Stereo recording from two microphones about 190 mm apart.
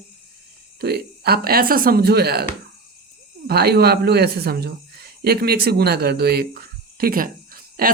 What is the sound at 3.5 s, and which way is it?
Speech, 55° right (ahead or behind).